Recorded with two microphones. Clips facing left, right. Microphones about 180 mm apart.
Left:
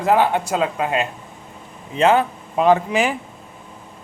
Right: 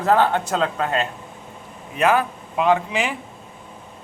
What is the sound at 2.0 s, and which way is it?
A man's voice, 25° left (ahead or behind).